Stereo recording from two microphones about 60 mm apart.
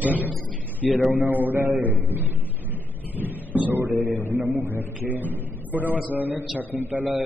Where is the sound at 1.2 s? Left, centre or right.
Right.